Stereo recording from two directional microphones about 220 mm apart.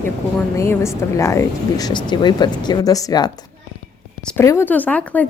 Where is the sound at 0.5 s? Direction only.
15° left (ahead or behind).